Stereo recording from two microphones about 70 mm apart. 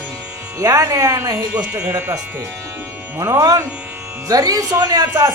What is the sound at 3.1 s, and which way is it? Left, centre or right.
Speech, right.